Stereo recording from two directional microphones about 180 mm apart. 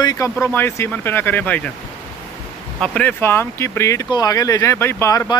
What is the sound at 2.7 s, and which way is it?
Speech, 5° left (ahead or behind).